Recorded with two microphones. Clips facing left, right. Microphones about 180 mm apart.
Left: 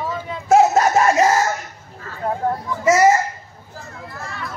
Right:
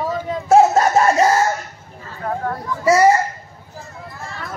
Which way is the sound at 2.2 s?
20° left (ahead or behind).